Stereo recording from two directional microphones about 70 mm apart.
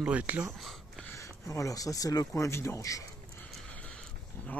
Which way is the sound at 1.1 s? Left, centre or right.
Left.